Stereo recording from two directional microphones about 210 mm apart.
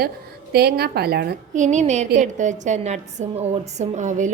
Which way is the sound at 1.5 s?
35° right (ahead or behind).